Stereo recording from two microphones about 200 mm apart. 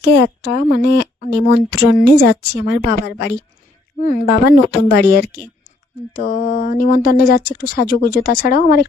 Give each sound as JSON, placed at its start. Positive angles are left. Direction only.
{"t": 0.0, "sound": "speech", "side_deg": 55}
{"t": 3.9, "sound": "speech", "side_deg": 40}